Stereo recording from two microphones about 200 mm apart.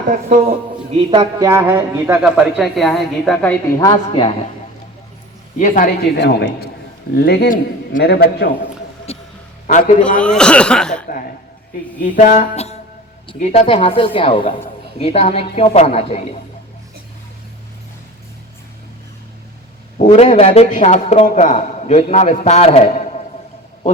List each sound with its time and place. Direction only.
0.1 s speech: 40° right (ahead or behind)
1.1 s speech: 20° right (ahead or behind)
2.6 s a woman's voice: centre (ahead or behind)
3.8 s speech: 25° left (ahead or behind)
5.5 s a man's voice: 40° left (ahead or behind)
9.1 s a sound: 30° left (ahead or behind)
9.6 s a man's voice: 40° left (ahead or behind)
10.2 s a woman's voice: 5° left (ahead or behind)
11.9 s a man's voice: 40° left (ahead or behind)
20.0 s a man's voice: 35° left (ahead or behind)